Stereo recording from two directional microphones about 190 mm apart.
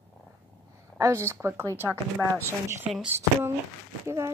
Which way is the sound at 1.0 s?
15° right (ahead or behind).